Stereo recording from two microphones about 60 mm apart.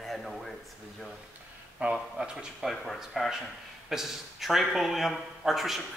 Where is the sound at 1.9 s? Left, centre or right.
Centre.